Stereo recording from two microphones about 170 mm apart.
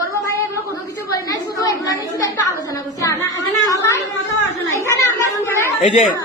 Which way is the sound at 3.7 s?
20° left (ahead or behind).